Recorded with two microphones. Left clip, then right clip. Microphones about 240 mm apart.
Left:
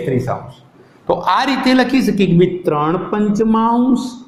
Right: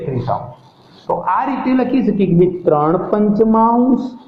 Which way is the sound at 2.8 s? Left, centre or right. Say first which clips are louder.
Right 2 dB; left.